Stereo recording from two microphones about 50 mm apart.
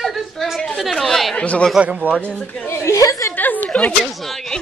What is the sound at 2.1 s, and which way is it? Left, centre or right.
Speech, right.